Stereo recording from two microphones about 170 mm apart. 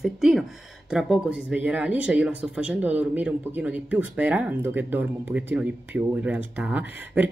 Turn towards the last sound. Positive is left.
turn(degrees=-10)  # may be behind; listen again after turning